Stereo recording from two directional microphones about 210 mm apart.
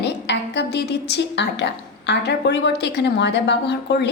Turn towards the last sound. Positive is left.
turn(degrees=55)  # may be behind; listen again after turning